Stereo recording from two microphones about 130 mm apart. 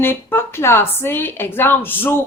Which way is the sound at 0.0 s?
15° left (ahead or behind).